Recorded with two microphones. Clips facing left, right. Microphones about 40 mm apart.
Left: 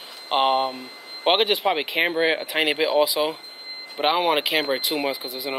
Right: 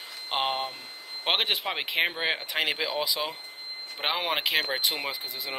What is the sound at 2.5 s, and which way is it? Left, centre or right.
Speech, centre.